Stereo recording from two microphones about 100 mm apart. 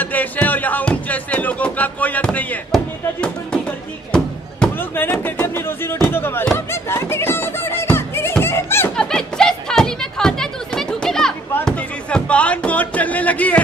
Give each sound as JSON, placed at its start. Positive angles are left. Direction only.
{"t": 0.0, "sound": "music", "side_deg": 15}
{"t": 4.7, "sound": "music", "side_deg": 20}
{"t": 5.2, "sound": "speech", "side_deg": 25}
{"t": 6.7, "sound": "music", "side_deg": 25}
{"t": 8.9, "sound": "a sound", "side_deg": 5}
{"t": 11.6, "sound": "speech", "side_deg": 10}